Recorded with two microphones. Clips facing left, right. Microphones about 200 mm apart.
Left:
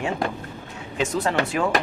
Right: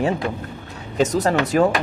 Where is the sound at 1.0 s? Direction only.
40° right (ahead or behind).